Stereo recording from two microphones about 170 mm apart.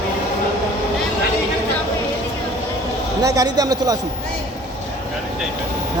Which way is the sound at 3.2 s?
20° right (ahead or behind).